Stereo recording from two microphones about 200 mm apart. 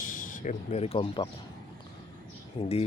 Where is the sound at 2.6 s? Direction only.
30° left (ahead or behind).